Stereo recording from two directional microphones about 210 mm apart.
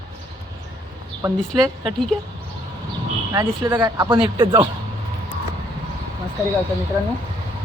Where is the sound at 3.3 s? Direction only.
15° right (ahead or behind).